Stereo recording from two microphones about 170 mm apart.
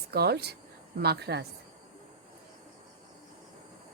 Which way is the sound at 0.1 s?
70° right (ahead or behind).